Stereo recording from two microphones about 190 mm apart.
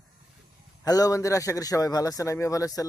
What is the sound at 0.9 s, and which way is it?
A man's voice, 20° left (ahead or behind).